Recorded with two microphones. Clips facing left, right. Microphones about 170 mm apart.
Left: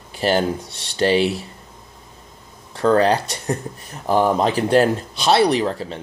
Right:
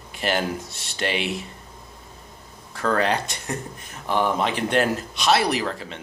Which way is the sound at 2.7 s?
30° left (ahead or behind).